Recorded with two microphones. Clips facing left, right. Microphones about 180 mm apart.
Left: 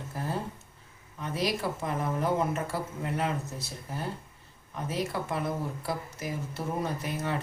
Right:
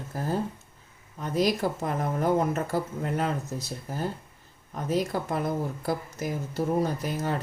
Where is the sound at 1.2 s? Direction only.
45° right (ahead or behind).